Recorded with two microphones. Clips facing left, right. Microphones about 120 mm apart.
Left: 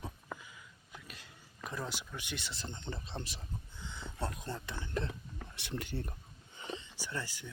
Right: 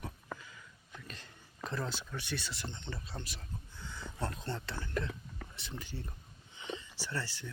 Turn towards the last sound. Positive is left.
turn(degrees=15)  # may be behind; listen again after turning